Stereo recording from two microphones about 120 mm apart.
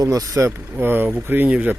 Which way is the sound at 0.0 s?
30° right (ahead or behind).